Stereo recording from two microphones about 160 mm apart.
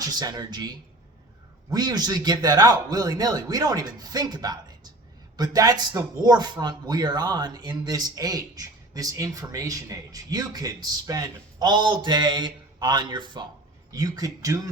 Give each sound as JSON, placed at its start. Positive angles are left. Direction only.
{"t": 0.0, "sound": "speech", "side_deg": -25}
{"t": 1.7, "sound": "speech", "side_deg": -25}